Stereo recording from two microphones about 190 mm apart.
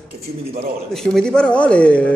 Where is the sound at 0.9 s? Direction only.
5° left (ahead or behind).